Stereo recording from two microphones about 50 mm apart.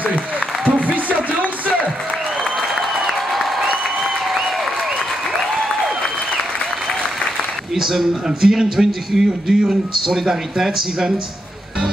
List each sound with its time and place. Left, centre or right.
0.7 s music: right
2.5 s applause: centre
7.7 s speech: centre